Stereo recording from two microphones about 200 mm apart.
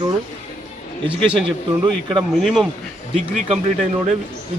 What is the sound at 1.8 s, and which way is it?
Speech, 25° right (ahead or behind).